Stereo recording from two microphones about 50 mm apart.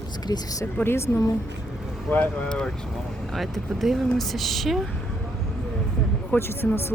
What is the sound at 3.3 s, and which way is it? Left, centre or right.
Speech, centre.